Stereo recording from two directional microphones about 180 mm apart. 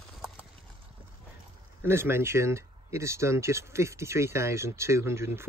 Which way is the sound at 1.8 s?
15° right (ahead or behind).